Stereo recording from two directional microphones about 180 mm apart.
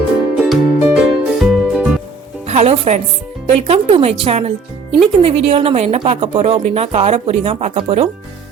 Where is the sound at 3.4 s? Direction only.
35° right (ahead or behind).